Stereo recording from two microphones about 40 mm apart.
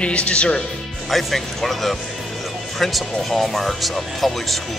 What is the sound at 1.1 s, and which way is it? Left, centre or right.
Speech, centre.